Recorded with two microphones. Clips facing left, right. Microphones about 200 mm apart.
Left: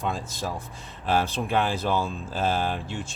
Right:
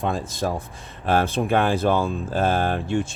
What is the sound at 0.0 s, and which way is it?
Speech, 60° right (ahead or behind).